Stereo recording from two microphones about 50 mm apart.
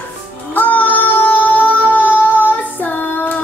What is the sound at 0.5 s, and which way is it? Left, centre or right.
Child singing, left.